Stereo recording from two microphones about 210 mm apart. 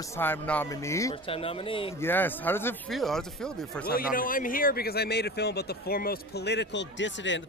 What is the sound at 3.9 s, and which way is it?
Speech, 40° left (ahead or behind).